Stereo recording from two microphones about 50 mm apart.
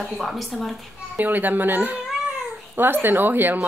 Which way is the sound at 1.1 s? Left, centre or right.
Right.